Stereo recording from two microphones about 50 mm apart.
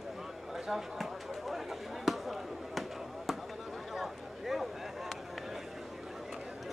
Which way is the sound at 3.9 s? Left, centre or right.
Centre.